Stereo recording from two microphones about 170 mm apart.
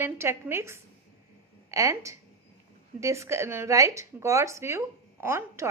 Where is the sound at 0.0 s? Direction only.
15° right (ahead or behind).